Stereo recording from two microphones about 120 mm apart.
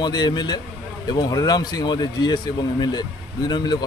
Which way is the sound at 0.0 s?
35° left (ahead or behind).